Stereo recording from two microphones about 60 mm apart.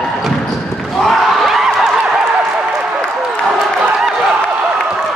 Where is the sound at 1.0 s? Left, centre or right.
Centre.